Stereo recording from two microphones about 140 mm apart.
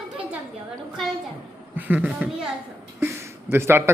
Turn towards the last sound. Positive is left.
turn(degrees=-15)  # may be behind; listen again after turning